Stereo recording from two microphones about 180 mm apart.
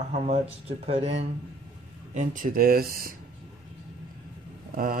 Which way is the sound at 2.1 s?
45° right (ahead or behind).